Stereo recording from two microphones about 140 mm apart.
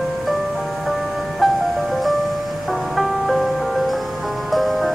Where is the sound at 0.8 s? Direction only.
Centre (ahead or behind).